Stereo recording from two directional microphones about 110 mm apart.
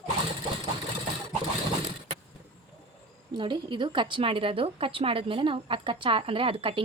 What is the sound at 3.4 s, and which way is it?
A woman's voice, 45° right (ahead or behind).